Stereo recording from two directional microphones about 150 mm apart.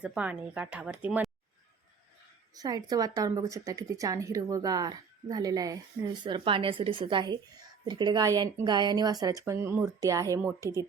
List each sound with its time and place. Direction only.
0.0 s speech: 10° right (ahead or behind)
2.6 s a woman's voice: 25° right (ahead or behind)